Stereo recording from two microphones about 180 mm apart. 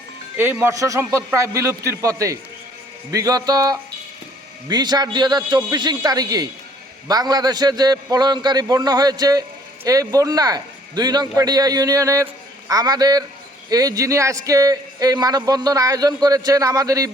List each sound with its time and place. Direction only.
0.3 s a man's voice: 10° right (ahead or behind)